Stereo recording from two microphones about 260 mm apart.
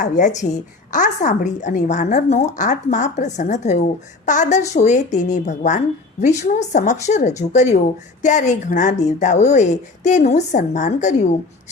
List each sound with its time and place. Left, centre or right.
0.0 s a woman's voice: left